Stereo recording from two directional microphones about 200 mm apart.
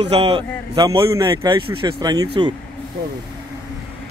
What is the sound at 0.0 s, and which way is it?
A man's voice, 30° right (ahead or behind).